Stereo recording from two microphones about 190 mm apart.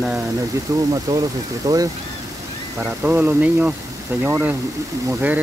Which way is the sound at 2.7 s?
10° right (ahead or behind).